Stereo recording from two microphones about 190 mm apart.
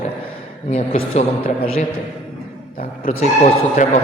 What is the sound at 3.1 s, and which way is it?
Speech, 35° left (ahead or behind).